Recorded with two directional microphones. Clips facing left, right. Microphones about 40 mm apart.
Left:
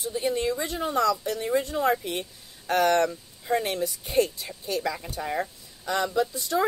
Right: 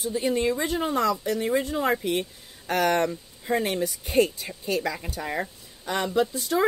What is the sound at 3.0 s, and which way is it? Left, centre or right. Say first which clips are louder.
Speech: left 1 dB; right.